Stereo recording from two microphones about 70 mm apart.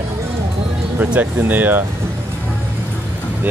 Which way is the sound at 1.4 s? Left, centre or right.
Right.